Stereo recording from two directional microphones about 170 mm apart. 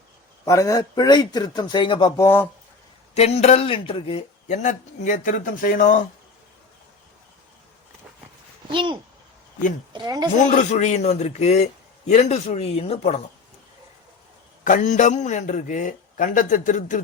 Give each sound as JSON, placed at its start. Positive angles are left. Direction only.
{"t": 0.4, "sound": "speech", "side_deg": 20}
{"t": 3.2, "sound": "speech", "side_deg": 40}
{"t": 8.7, "sound": "speech", "side_deg": -30}
{"t": 10.4, "sound": "a man's voice", "side_deg": 45}
{"t": 14.6, "sound": "speech", "side_deg": 50}